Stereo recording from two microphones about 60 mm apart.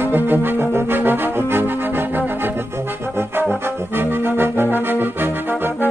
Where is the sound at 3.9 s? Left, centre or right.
Right.